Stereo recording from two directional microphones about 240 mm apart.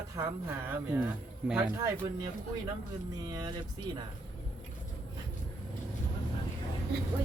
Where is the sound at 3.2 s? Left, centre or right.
Centre.